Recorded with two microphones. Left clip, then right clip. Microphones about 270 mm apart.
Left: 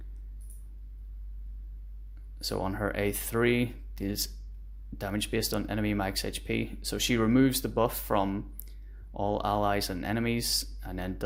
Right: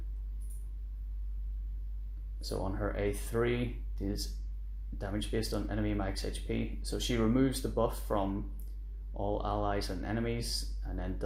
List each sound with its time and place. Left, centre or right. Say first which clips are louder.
2.4 s speech: left 5 dB; left